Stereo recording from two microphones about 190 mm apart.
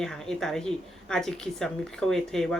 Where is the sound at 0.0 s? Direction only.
5° left (ahead or behind).